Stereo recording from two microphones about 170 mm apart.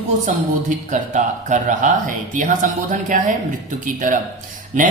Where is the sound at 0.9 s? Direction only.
45° right (ahead or behind).